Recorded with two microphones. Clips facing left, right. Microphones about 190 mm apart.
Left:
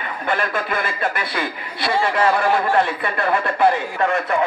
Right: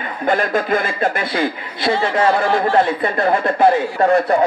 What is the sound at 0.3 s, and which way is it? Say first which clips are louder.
A man's voice: right 6 dB; 40° right (ahead or behind).